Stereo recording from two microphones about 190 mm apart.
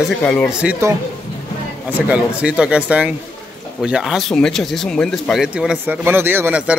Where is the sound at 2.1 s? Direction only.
5° right (ahead or behind).